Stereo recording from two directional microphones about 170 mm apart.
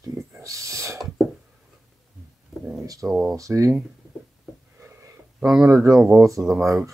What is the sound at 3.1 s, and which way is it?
Speech, centre (ahead or behind).